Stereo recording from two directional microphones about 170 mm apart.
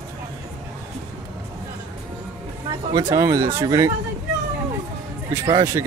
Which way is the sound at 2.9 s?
25° right (ahead or behind).